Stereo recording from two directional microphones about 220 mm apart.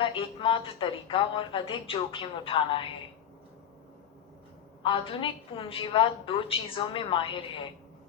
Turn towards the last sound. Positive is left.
turn(degrees=20)  # may be behind; listen again after turning